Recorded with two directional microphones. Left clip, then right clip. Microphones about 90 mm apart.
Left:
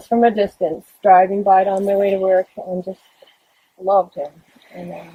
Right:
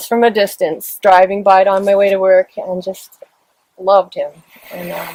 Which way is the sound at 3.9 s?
20° right (ahead or behind).